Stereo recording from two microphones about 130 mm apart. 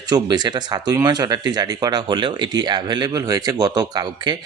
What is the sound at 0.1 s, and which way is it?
Speech, 35° right (ahead or behind).